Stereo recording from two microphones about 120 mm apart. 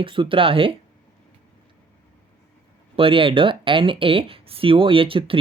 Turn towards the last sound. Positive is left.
turn(degrees=-45)  # may be behind; listen again after turning